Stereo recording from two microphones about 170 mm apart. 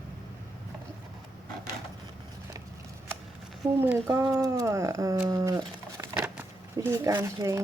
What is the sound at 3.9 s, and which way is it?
Speech, 15° right (ahead or behind).